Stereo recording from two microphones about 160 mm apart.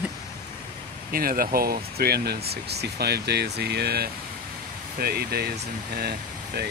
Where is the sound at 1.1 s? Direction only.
65° right (ahead or behind).